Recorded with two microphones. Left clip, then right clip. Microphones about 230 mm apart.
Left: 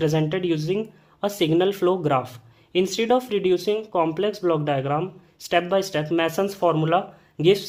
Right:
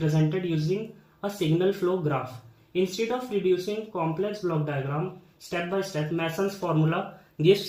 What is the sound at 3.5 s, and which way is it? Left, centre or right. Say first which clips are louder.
Speech: left 5 dB; left.